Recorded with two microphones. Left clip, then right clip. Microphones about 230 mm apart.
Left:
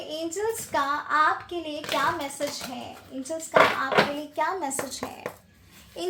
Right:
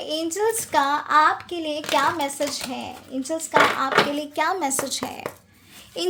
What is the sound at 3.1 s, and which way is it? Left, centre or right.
Speech, right.